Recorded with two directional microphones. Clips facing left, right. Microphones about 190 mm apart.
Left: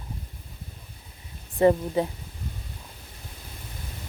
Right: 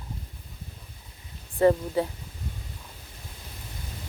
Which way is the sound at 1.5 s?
20° left (ahead or behind).